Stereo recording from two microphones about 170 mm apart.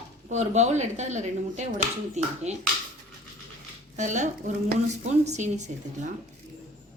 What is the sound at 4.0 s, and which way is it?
Speech, 45° right (ahead or behind).